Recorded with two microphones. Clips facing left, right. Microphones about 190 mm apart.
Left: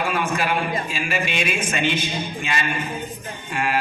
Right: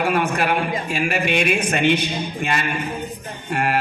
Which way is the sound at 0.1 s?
55° right (ahead or behind).